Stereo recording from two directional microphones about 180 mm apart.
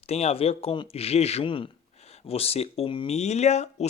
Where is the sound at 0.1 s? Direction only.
35° left (ahead or behind).